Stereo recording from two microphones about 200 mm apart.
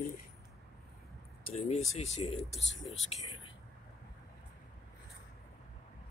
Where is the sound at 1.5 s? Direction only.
35° left (ahead or behind).